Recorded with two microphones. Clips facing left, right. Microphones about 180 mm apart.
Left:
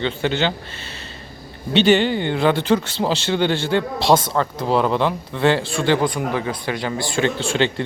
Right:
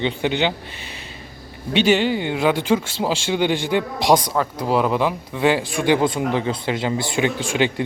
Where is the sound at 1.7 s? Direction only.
5° right (ahead or behind).